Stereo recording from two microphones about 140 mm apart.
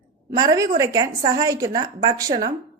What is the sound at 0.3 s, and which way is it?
A woman's voice, 25° right (ahead or behind).